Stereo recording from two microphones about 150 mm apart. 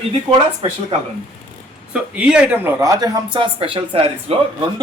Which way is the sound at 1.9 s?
5° right (ahead or behind).